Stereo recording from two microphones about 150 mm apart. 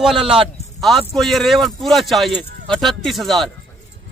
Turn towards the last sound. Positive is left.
turn(degrees=0)  # may be behind; listen again after turning